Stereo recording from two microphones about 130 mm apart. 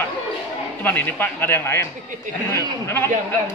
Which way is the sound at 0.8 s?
15° left (ahead or behind).